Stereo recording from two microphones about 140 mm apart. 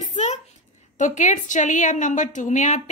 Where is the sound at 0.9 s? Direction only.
60° left (ahead or behind).